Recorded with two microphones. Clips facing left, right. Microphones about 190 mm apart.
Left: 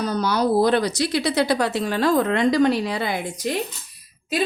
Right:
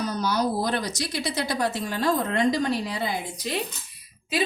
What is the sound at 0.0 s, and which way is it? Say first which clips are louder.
Speech: left 4 dB; 65° left (ahead or behind).